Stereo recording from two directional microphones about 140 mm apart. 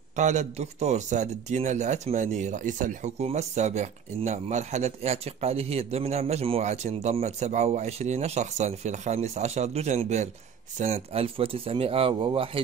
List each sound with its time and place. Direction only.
0.1 s speech: 60° right (ahead or behind); by 12.4 s 35° right (ahead or behind)